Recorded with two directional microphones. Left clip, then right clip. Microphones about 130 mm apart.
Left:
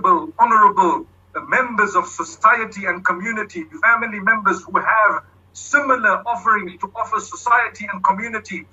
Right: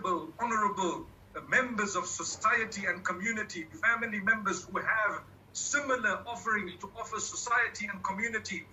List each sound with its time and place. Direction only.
0.0 s a man's voice: 35° left (ahead or behind)